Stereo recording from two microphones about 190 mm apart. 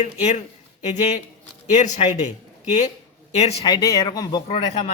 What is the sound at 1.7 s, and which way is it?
A man's voice, 40° left (ahead or behind).